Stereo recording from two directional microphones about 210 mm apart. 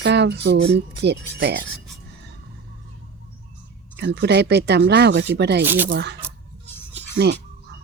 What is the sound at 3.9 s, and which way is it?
Speech, 55° right (ahead or behind).